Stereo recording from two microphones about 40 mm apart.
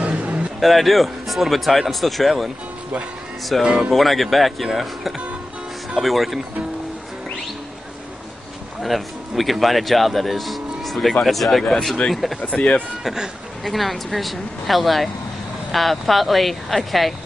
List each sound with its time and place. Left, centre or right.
0.2 s a sound: right
0.6 s speech: centre
5.9 s speech: centre
8.8 s speech: centre
12.4 s speech: centre
13.0 s speech: centre
13.7 s speech: centre